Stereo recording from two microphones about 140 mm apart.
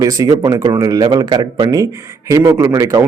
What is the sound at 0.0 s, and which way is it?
A man's voice, 25° right (ahead or behind).